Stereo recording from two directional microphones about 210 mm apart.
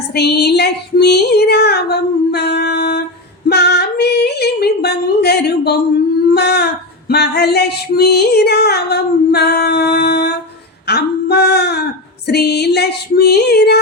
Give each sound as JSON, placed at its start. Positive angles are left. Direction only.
{"t": 0.1, "sound": "music", "side_deg": 50}
{"t": 3.5, "sound": "singing", "side_deg": 50}
{"t": 6.3, "sound": "music", "side_deg": 50}